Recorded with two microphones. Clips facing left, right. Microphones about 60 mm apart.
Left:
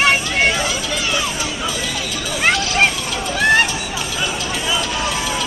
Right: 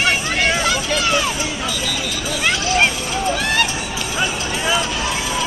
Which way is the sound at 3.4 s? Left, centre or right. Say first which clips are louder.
Left 10 dB; left.